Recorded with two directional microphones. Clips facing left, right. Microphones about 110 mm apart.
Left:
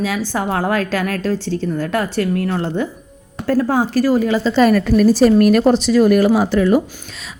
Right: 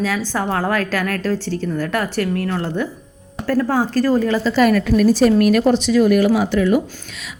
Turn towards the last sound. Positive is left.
turn(degrees=35)  # may be behind; listen again after turning